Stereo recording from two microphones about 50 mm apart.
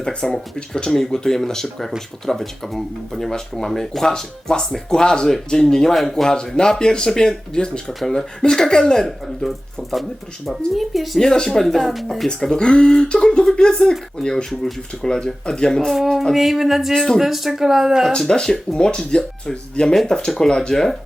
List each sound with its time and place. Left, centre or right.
0.0 s speech: centre
6.6 s speech: centre
11.2 s speech: centre
12.3 s speech: centre
16.3 s speech: centre
16.9 s speech: centre
17.2 s speech: centre
18.2 s speech: centre